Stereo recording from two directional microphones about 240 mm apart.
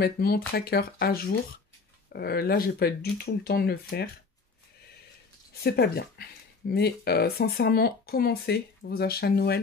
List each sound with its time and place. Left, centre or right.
0.0 s speech: left
5.6 s speech: left